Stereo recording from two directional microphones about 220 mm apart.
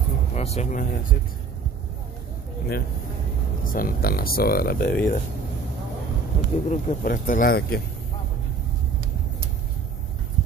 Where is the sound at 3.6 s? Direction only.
40° left (ahead or behind).